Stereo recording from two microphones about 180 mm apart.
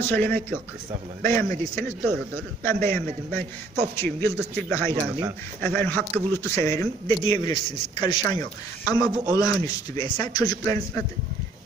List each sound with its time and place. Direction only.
0.0 s a man's voice: 10° left (ahead or behind)